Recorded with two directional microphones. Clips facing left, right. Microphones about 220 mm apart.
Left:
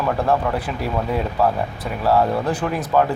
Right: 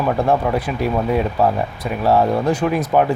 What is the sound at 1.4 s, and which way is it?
Speech, 20° right (ahead or behind).